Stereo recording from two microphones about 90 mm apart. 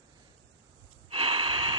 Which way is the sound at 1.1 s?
85° right.